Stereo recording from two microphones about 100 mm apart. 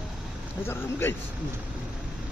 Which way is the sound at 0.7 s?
25° left (ahead or behind).